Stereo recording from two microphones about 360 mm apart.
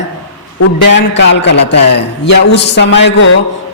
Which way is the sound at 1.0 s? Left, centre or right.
Left.